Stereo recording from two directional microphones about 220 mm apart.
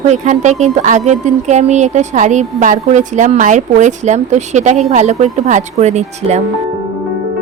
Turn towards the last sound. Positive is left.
turn(degrees=-30)  # may be behind; listen again after turning